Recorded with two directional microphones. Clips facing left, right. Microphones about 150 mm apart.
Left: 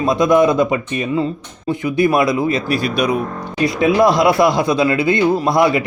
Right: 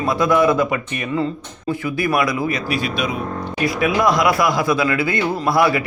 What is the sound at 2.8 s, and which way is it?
Speech, 40° left (ahead or behind).